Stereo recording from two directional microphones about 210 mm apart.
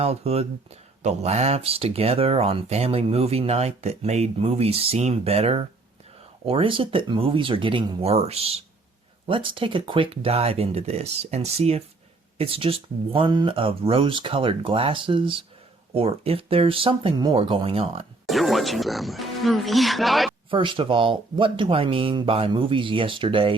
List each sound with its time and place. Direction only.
0.0 s speech: 30° right (ahead or behind)
18.3 s speech: centre (ahead or behind)
20.5 s speech: 25° right (ahead or behind)